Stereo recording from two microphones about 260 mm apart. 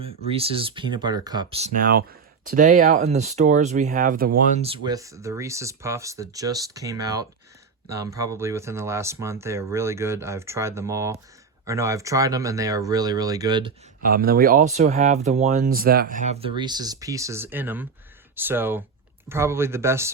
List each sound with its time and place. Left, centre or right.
0.0 s speech: right
14.0 s speech: right; by 20.1 s centre